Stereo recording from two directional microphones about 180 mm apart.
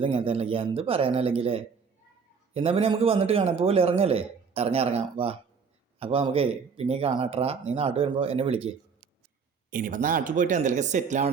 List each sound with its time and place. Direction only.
0.0 s a man's voice: 30° right (ahead or behind)
9.6 s speech: 50° right (ahead or behind)